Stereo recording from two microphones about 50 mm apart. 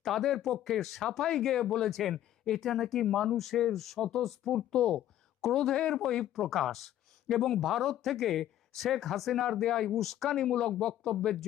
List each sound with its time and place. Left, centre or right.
0.0 s speech: centre
4.7 s speech: centre